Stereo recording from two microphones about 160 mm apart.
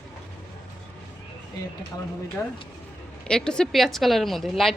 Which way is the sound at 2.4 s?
15° left (ahead or behind).